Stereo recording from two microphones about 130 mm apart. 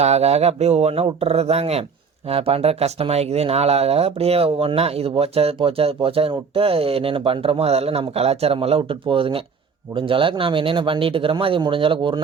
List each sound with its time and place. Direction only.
0.0 s speech: 55° right (ahead or behind)